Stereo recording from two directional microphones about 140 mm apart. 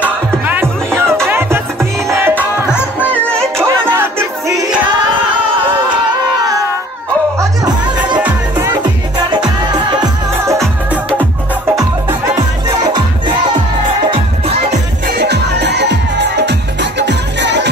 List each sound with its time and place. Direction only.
0.0 s music: 15° right (ahead or behind)
3.5 s music: 20° right (ahead or behind)
7.3 s music: 30° right (ahead or behind)
8.8 s music: 30° right (ahead or behind)